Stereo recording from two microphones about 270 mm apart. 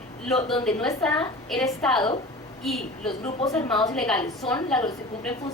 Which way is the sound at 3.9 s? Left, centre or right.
Centre.